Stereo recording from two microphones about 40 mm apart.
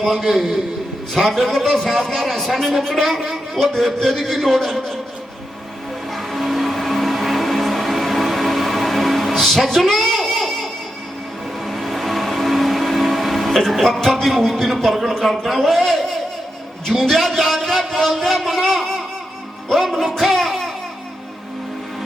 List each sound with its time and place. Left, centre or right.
0.0 s a man's voice: centre
6.1 s vehicle: centre
15.2 s a man's voice: centre
16.9 s a sound: centre